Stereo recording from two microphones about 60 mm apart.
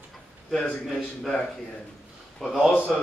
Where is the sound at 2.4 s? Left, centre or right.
Centre.